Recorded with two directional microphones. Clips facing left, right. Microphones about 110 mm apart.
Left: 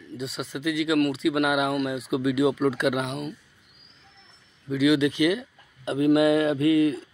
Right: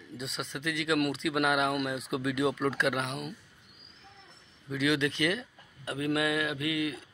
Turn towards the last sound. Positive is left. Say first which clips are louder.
# left 11 dB
turn(degrees=35)  # may be behind; listen again after turning